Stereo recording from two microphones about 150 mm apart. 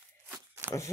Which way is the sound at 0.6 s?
15° right (ahead or behind).